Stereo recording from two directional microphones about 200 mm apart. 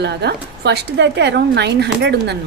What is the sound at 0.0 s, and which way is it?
Speech, 55° right (ahead or behind).